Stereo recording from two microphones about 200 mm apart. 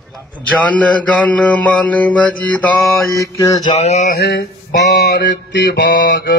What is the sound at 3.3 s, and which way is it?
Mantra, 15° left (ahead or behind).